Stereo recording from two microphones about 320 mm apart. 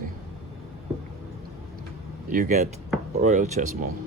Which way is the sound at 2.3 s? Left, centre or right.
Right.